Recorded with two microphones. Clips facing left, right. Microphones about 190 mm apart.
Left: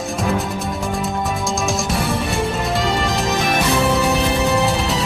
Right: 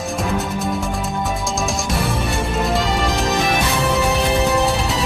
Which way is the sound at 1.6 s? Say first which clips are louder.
Even; centre (ahead or behind).